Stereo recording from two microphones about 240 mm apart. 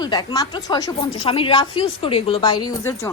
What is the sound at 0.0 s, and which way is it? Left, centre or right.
A woman's voice, centre.